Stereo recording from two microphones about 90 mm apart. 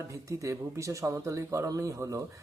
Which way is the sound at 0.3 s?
35° right (ahead or behind).